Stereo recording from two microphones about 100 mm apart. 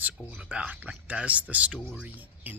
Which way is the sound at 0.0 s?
15° right (ahead or behind).